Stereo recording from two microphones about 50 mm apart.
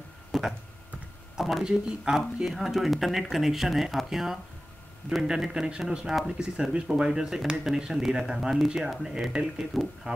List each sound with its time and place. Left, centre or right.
0.3 s a sound: centre
1.6 s speech: centre
9.7 s speech: centre